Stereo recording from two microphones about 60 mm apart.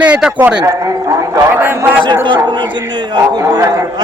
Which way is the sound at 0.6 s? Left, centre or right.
Right.